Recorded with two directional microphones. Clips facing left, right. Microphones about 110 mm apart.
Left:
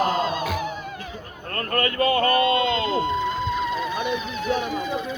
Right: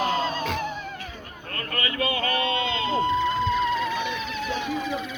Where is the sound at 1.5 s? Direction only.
50° left (ahead or behind).